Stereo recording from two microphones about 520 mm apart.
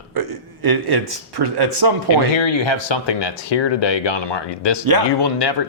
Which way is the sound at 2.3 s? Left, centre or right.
Left.